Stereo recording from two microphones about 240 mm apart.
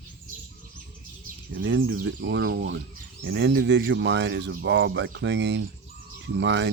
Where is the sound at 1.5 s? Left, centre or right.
Right.